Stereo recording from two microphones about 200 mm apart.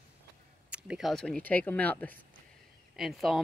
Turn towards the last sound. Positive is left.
turn(degrees=0)  # may be behind; listen again after turning